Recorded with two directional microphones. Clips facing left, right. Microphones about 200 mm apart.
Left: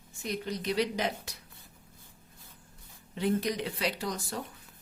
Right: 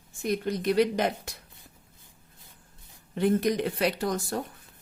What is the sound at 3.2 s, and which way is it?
Speech, 50° right (ahead or behind).